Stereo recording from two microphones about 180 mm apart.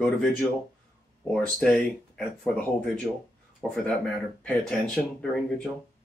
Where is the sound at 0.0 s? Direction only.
Centre (ahead or behind).